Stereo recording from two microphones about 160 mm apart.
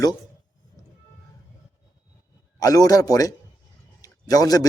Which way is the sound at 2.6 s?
20° left (ahead or behind).